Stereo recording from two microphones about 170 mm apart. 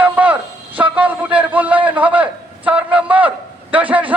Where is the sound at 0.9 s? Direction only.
10° right (ahead or behind).